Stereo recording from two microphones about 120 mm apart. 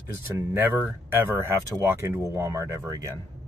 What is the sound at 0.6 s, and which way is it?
Speech, 20° right (ahead or behind).